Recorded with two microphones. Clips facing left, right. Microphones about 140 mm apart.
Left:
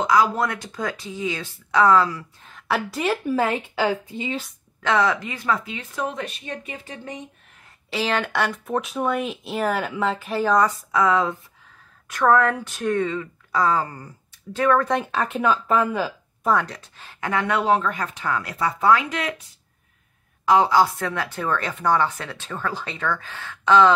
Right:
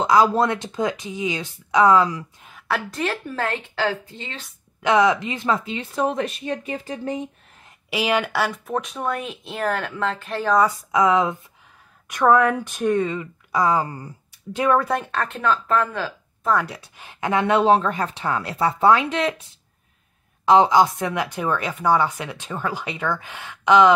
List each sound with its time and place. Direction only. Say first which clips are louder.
0.0 s speech: right 3 dB; 30° right (ahead or behind)
2.7 s a woman's voice: left 2 dB; 10° left (ahead or behind)
4.8 s speech: right 3 dB; 15° right (ahead or behind); by 7.2 s 40° right (ahead or behind)
7.9 s speech: right 2 dB; 10° right (ahead or behind)
10.9 s speech: right 2 dB; 15° right (ahead or behind)
14.9 s speech: left 1 dB; centre (ahead or behind)
16.6 s speech: right 2 dB; 10° right (ahead or behind); by 19.4 s 25° right (ahead or behind)
20.4 s speech: right 2 dB; 20° right (ahead or behind)